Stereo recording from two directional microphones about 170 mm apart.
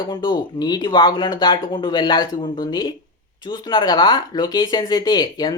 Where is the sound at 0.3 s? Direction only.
25° left (ahead or behind).